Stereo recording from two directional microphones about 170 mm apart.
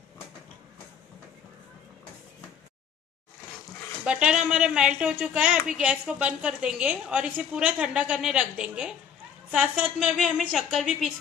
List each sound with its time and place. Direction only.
4.0 s a woman's voice: 5° right (ahead or behind)